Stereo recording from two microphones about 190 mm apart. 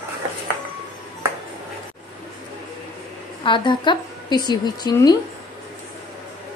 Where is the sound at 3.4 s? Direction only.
25° left (ahead or behind).